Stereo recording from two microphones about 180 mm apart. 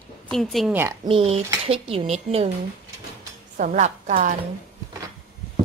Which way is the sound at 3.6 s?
45° right (ahead or behind).